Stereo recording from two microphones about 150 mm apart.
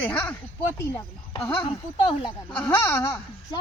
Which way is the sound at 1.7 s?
35° left (ahead or behind).